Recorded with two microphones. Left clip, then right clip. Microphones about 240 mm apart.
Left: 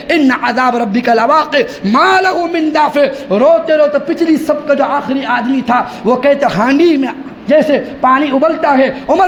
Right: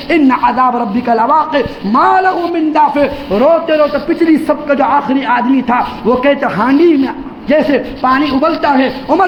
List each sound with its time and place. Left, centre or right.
0.1 s a man's voice: left